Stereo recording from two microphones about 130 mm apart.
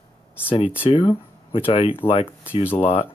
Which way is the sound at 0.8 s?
40° left (ahead or behind).